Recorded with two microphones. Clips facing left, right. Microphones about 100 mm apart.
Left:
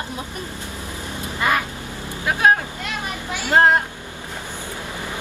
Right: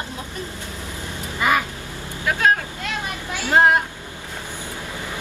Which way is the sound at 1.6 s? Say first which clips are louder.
Even; 15° left (ahead or behind).